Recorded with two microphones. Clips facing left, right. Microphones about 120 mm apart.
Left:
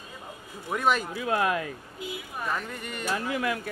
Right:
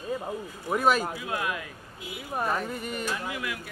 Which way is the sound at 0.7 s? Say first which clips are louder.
Right 2 dB; 5° right (ahead or behind).